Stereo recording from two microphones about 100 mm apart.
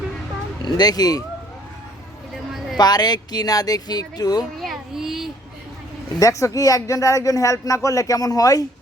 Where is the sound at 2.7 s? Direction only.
45° left (ahead or behind).